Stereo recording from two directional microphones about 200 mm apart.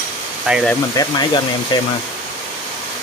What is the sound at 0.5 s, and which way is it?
Speech, 5° right (ahead or behind).